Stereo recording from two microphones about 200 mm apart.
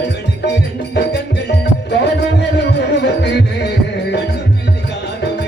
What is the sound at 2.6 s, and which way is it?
Music, 55° left (ahead or behind).